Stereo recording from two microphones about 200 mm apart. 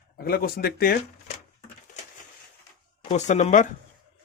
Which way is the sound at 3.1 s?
35° left (ahead or behind).